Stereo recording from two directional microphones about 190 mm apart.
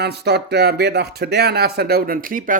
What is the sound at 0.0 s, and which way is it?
Speech, 60° right (ahead or behind).